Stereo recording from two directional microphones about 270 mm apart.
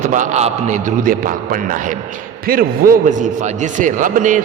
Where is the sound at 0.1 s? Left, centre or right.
Right.